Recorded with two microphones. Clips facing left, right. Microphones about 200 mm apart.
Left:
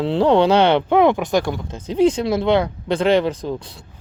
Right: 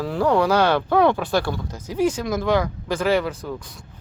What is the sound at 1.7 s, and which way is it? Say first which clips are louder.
Speech: left 7 dB; 30° left (ahead or behind).